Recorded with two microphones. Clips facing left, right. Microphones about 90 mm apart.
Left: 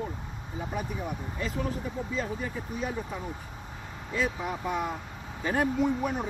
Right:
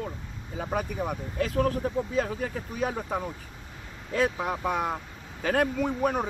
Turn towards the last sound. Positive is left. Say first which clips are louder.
# right 1 dB
turn(degrees=-50)  # may be behind; listen again after turning